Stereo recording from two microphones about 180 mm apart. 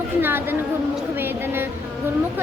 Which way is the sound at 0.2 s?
10° right (ahead or behind).